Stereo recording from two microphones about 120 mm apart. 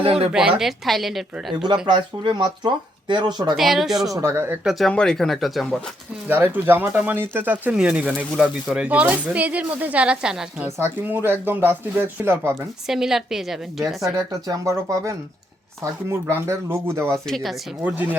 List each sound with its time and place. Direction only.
0.0 s speech: 55° right (ahead or behind)
0.3 s speech: 5° right (ahead or behind)
1.9 s speech: 40° right (ahead or behind)
3.5 s speech: centre (ahead or behind)
4.1 s speech: 25° right (ahead or behind)
4.6 s speech: centre (ahead or behind)
6.2 s speech: 15° right (ahead or behind)
12.9 s speech: 5° right (ahead or behind)
13.8 s speech: 30° right (ahead or behind)
17.2 s speech: centre (ahead or behind)
17.8 s speech: 15° right (ahead or behind)